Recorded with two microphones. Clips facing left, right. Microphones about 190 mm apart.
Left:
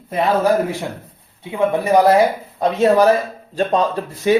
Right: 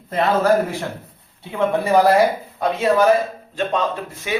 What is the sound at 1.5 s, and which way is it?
Speech, 15° left (ahead or behind).